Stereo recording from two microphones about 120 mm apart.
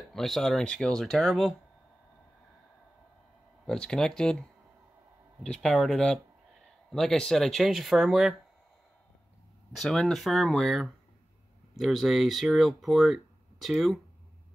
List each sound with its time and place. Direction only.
0.1 s speech: centre (ahead or behind)
3.6 s speech: 5° left (ahead or behind)
9.7 s speech: centre (ahead or behind)